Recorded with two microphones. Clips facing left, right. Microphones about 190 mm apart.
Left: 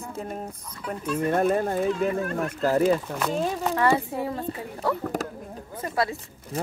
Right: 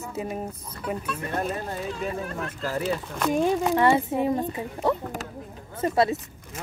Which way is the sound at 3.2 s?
15° right (ahead or behind).